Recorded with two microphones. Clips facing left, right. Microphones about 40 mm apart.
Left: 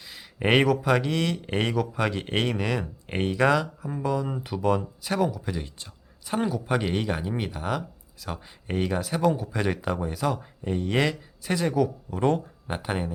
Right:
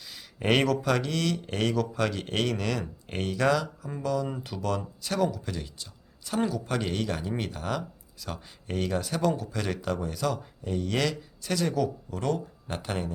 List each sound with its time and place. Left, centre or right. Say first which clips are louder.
0.0 s speech: left 4 dB; centre